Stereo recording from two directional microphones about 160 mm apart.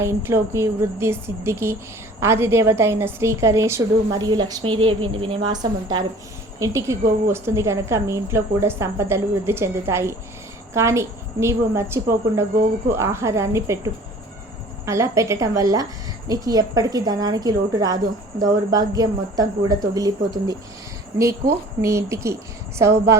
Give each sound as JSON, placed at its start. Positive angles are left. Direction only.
{"t": 0.0, "sound": "a woman's voice", "side_deg": -15}